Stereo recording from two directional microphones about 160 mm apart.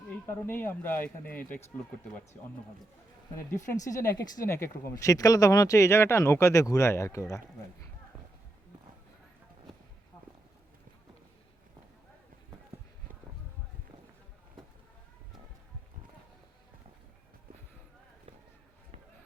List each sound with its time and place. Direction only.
0.3 s speech: 15° left (ahead or behind)
3.7 s speech: 20° left (ahead or behind)